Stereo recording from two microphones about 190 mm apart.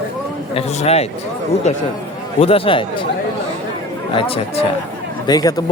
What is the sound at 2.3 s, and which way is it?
Speech, 30° left (ahead or behind).